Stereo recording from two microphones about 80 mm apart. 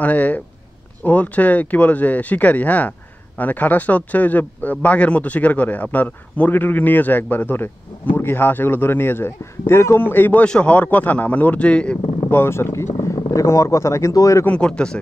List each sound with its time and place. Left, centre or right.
0.0 s a man's voice: centre
10.4 s speech: centre
12.3 s speech: left
14.4 s speech: centre